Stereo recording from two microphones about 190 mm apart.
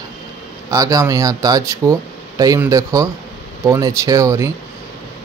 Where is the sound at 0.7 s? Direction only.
15° right (ahead or behind).